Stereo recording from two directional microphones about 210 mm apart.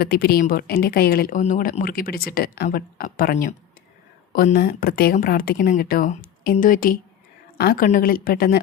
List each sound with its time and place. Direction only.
0.0 s speech: 45° left (ahead or behind)